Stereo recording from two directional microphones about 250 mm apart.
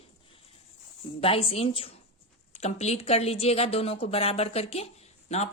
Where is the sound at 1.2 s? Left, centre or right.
Left.